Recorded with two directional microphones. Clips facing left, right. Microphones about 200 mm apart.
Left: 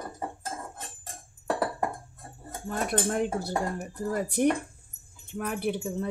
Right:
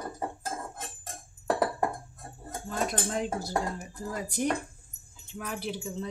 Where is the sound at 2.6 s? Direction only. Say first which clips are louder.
Left 3 dB; 55° left (ahead or behind).